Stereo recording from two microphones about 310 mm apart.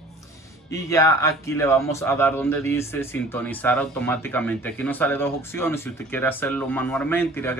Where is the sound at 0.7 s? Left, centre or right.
Centre.